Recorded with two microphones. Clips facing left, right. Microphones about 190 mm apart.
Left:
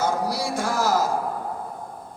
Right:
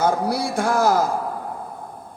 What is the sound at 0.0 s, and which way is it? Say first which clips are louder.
A man's voice: right 4 dB; 55° right (ahead or behind).